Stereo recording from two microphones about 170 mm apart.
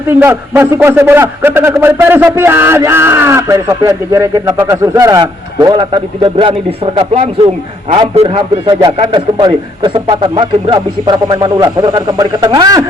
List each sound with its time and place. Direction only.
0.1 s a man's voice: 15° right (ahead or behind)